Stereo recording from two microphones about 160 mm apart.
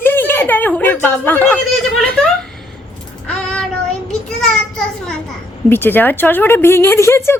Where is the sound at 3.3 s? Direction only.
5° left (ahead or behind).